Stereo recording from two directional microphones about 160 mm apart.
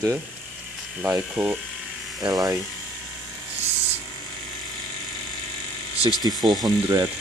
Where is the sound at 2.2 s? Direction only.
25° right (ahead or behind).